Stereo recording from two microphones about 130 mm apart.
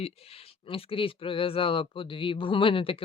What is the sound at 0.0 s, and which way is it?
Speech, 50° left (ahead or behind).